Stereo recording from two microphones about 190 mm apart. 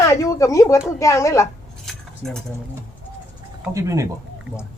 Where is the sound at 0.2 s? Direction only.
15° left (ahead or behind).